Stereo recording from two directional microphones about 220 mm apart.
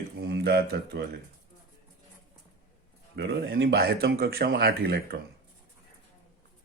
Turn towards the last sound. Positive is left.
turn(degrees=-45)  # may be behind; listen again after turning